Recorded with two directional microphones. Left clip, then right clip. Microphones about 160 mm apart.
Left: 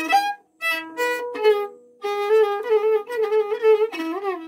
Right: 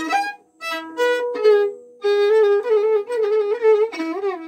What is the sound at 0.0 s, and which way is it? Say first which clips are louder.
Violin: left 2 dB; 25° left (ahead or behind).